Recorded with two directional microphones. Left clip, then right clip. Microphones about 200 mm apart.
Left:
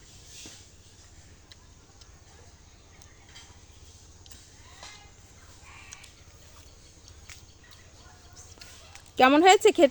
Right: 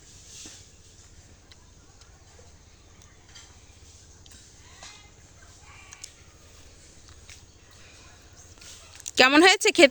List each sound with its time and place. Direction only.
9.1 s speech: 10° right (ahead or behind)